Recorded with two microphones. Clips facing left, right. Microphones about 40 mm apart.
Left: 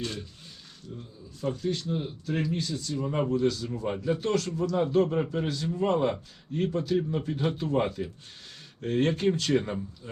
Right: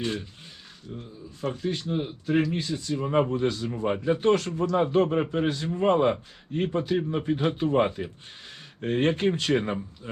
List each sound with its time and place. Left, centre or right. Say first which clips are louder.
0.0 s speech: right 5 dB; right